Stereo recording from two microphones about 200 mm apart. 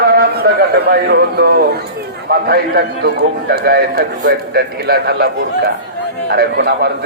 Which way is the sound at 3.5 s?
50° right (ahead or behind).